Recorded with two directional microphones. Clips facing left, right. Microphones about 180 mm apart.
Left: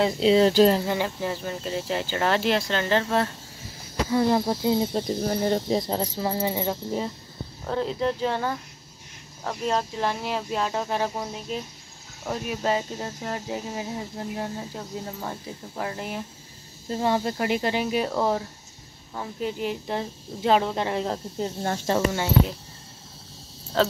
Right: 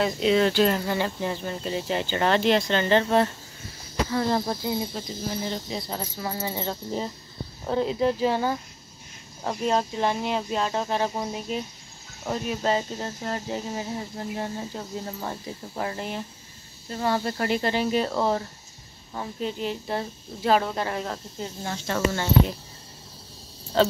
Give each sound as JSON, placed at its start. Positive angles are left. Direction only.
{"t": 0.0, "sound": "speech", "side_deg": 30}
{"t": 0.9, "sound": "speech", "side_deg": 5}
{"t": 4.1, "sound": "speech", "side_deg": 15}
{"t": 5.1, "sound": "speech", "side_deg": 60}
{"t": 5.7, "sound": "speech", "side_deg": 35}
{"t": 7.6, "sound": "speech", "side_deg": -5}
{"t": 9.7, "sound": "speech", "side_deg": 0}
{"t": 11.1, "sound": "speech", "side_deg": -5}
{"t": 16.9, "sound": "speech", "side_deg": 20}
{"t": 19.4, "sound": "speech", "side_deg": 15}
{"t": 23.8, "sound": "speech", "side_deg": 0}